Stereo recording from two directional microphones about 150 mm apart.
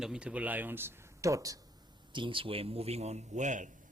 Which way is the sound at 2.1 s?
35° right (ahead or behind).